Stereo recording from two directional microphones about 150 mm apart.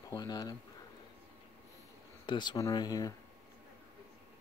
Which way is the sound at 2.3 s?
30° left (ahead or behind).